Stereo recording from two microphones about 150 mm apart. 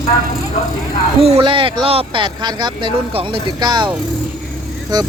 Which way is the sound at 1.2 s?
40° right (ahead or behind).